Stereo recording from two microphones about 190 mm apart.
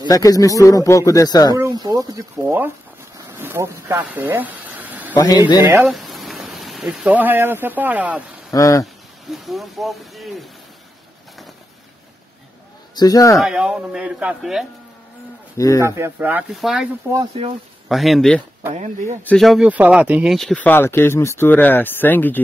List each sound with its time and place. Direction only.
0.1 s speech: 20° left (ahead or behind)
1.5 s speech: 20° right (ahead or behind)
3.3 s a sound: 10° right (ahead or behind)
5.1 s a man's voice: 20° left (ahead or behind)
5.8 s speech: centre (ahead or behind)
8.5 s speech: 20° left (ahead or behind)
9.3 s a man's voice: centre (ahead or behind)
12.9 s speech: 20° left (ahead or behind)
13.4 s a man's voice: 5° right (ahead or behind)
15.5 s speech: 15° left (ahead or behind)
15.8 s a man's voice: 10° right (ahead or behind); by 22.4 s 10° left (ahead or behind)